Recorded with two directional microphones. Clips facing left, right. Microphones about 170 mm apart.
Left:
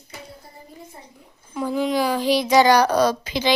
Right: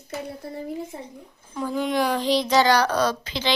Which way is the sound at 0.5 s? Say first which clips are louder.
Right 11 dB; 80° right.